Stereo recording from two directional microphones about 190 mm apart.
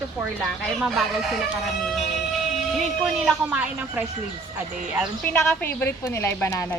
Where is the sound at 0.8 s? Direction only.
Centre (ahead or behind).